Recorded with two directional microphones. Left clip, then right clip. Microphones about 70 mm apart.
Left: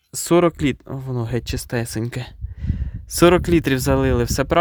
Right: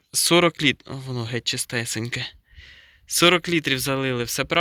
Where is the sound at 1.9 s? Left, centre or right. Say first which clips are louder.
Even; left.